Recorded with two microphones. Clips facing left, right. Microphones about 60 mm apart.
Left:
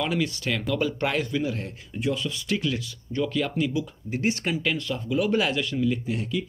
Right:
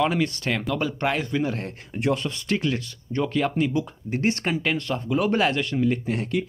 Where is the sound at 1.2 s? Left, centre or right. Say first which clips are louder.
Right 2 dB; right.